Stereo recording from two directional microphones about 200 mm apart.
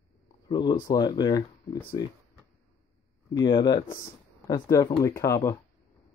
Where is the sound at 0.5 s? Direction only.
20° left (ahead or behind).